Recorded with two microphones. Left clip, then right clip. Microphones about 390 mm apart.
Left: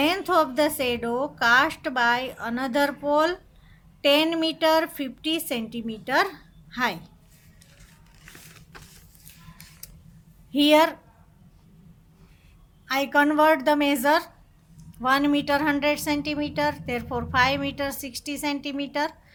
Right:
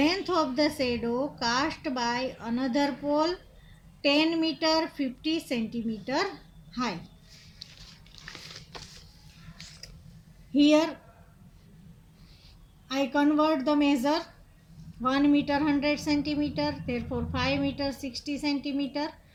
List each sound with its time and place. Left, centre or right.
0.0 s a woman's voice: left
10.5 s a woman's voice: left
12.9 s a woman's voice: left